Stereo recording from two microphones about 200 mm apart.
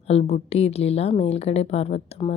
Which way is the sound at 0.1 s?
35° left (ahead or behind).